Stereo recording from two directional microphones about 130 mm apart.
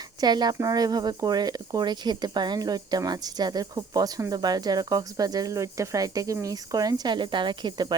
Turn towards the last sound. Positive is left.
turn(degrees=-35)  # may be behind; listen again after turning